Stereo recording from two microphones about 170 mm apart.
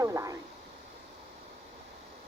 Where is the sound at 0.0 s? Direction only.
20° right (ahead or behind).